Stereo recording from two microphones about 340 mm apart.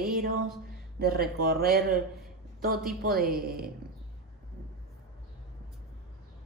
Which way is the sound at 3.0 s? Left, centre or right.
Right.